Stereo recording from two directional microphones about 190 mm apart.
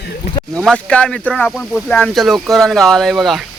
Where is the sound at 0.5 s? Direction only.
5° left (ahead or behind).